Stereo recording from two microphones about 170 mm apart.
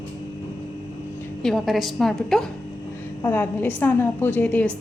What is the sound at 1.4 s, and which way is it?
A woman's voice, 5° left (ahead or behind).